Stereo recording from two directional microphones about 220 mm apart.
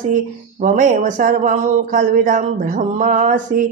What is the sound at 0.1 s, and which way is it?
Speech, 35° right (ahead or behind).